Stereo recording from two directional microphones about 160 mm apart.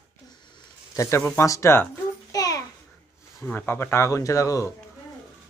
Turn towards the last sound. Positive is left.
turn(degrees=20)  # may be behind; listen again after turning